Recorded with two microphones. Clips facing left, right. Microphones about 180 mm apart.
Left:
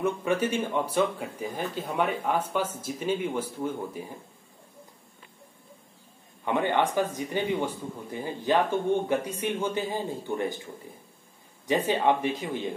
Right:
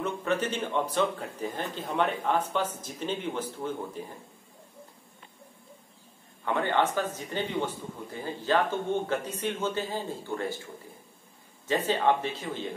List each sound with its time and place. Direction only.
0.0 s speech: 10° left (ahead or behind)
6.4 s speech: 15° left (ahead or behind)
11.6 s speech: 15° left (ahead or behind)